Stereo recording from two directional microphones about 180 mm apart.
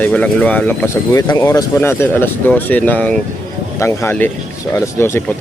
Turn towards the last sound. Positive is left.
turn(degrees=15)  # may be behind; listen again after turning